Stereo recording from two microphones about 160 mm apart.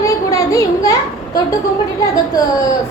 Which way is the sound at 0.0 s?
20° left (ahead or behind).